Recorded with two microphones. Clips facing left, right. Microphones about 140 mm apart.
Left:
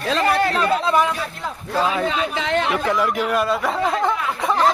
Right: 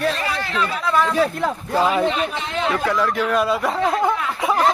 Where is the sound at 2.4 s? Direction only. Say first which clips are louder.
Left 3 dB; 90° left.